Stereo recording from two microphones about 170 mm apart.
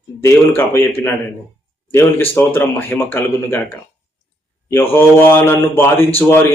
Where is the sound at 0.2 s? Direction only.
15° left (ahead or behind).